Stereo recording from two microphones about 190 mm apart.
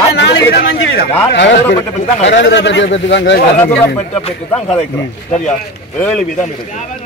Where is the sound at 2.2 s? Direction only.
70° left (ahead or behind).